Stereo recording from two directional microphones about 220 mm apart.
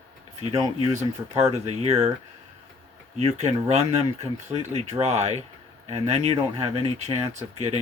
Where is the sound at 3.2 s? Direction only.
30° right (ahead or behind).